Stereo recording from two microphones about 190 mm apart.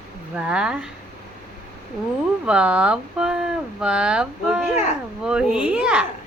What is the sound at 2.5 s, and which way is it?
A woman's voice, 5° right (ahead or behind).